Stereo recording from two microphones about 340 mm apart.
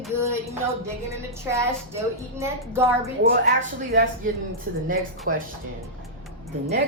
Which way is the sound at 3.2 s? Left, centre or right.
Right.